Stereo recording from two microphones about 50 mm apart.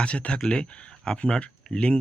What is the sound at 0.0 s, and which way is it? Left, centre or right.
Speech, left.